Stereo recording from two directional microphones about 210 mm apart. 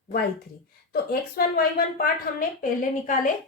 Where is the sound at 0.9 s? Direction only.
45° left (ahead or behind).